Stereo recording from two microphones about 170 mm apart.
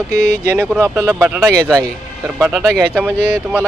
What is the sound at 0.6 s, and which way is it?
Speech, 5° right (ahead or behind).